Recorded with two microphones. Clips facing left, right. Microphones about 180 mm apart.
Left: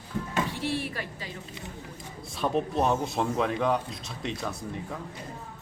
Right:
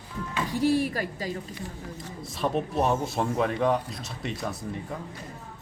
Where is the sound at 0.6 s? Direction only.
40° right (ahead or behind).